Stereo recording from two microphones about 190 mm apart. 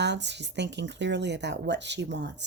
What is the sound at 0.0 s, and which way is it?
Speech, 65° right (ahead or behind).